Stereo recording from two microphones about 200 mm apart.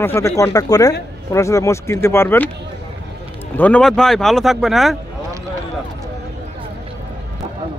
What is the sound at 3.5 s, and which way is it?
Speech, 5° left (ahead or behind).